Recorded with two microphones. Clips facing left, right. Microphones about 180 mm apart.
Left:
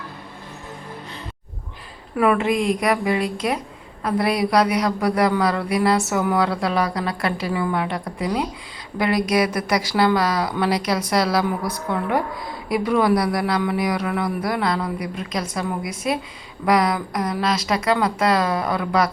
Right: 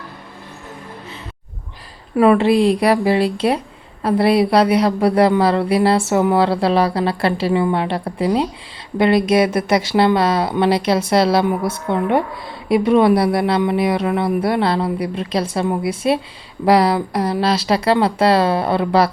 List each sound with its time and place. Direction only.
2.1 s a woman's voice: 30° right (ahead or behind)